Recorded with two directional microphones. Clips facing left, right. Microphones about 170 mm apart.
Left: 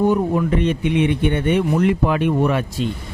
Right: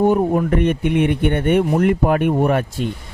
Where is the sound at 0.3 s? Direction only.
50° right (ahead or behind).